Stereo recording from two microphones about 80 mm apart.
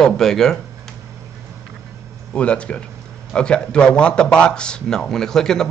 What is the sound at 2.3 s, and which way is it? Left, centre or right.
A man's voice, centre.